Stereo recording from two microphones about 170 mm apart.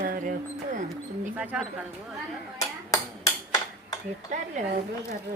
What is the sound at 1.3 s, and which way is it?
Speech, 10° right (ahead or behind).